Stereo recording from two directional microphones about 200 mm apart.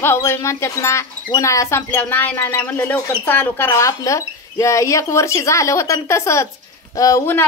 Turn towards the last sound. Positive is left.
turn(degrees=15)  # may be behind; listen again after turning